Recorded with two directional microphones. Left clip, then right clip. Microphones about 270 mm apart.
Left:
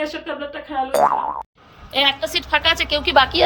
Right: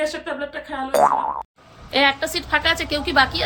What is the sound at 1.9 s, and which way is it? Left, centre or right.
A woman's voice, left.